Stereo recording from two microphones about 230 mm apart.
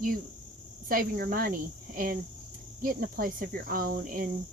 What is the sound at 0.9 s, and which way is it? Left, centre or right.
Speech, right.